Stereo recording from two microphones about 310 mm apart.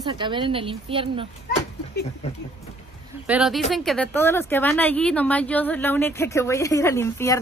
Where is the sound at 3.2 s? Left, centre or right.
Centre.